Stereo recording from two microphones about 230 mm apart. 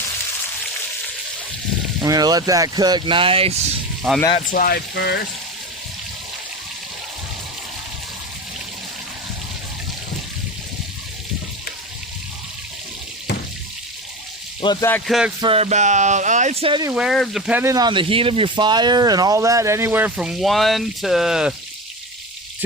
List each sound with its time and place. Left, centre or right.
2.0 s speech: centre
4.4 s speech: left
14.6 s speech: centre
15.4 s speech: right
16.9 s speech: centre